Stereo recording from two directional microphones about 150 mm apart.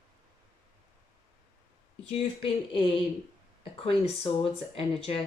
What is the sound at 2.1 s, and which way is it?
Speech, 35° left (ahead or behind).